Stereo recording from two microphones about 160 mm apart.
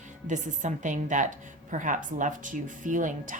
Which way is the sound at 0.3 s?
50° right (ahead or behind).